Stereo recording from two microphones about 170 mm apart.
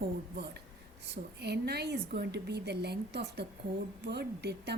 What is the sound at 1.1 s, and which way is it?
A woman's voice, 75° right (ahead or behind).